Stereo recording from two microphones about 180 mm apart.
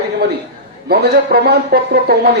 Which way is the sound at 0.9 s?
60° right (ahead or behind).